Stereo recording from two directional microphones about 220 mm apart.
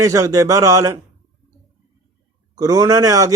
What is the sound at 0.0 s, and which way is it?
Speech, 15° right (ahead or behind).